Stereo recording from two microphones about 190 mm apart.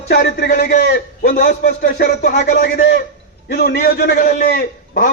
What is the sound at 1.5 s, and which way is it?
A man's voice, 55° left (ahead or behind).